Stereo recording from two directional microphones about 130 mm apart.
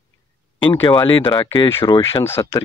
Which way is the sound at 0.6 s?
35° left (ahead or behind).